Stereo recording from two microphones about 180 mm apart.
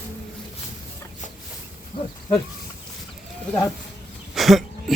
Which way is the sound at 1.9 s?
30° left (ahead or behind).